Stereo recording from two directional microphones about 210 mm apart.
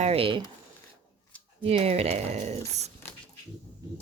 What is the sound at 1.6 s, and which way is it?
Speech, 30° right (ahead or behind).